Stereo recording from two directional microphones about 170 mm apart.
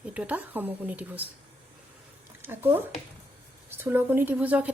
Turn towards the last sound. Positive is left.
turn(degrees=-10)  # may be behind; listen again after turning